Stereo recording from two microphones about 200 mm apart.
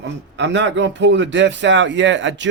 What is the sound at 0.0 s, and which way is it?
Speech, 60° right (ahead or behind).